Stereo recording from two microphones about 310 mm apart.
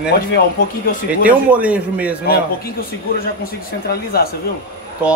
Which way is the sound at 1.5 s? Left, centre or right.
Centre.